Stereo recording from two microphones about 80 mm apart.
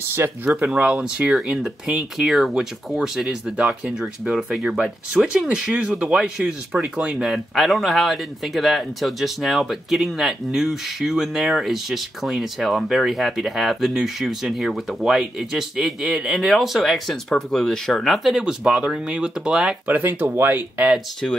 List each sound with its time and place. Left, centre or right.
0.2 s speech: right
0.7 s speech: centre
19.9 s speech: right